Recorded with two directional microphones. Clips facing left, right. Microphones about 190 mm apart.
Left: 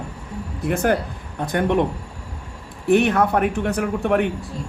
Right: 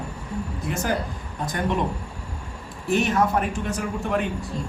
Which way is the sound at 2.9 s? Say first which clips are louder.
Left 5 dB; 60° left (ahead or behind).